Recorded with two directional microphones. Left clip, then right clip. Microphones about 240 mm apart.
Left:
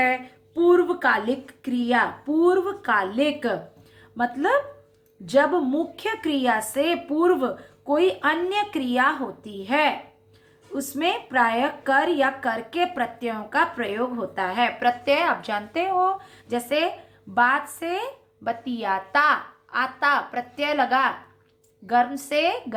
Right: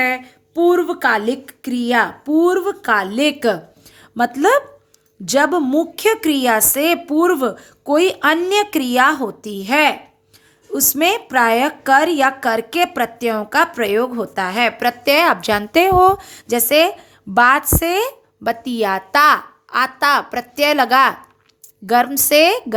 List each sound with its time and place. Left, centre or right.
0.0 s a woman's voice: right